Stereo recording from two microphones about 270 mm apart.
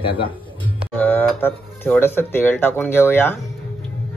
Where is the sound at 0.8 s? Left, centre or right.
Centre.